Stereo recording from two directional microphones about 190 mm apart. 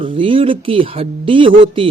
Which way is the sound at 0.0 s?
25° right (ahead or behind).